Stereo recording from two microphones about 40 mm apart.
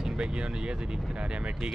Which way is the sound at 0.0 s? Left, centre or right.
Centre.